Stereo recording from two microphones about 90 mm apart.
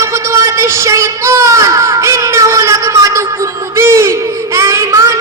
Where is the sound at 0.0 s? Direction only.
30° right (ahead or behind).